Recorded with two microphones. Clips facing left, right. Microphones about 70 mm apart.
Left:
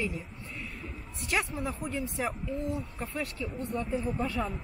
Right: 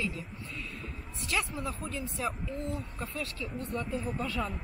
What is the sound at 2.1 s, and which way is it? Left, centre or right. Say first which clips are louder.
A woman's voice: left 2 dB; left.